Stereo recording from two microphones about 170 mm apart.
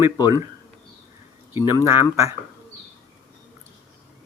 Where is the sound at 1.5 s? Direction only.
15° right (ahead or behind).